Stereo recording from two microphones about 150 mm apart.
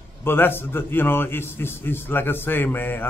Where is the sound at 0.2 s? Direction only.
15° left (ahead or behind).